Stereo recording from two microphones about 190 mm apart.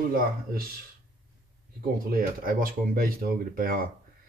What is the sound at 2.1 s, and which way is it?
Speech, 50° right (ahead or behind).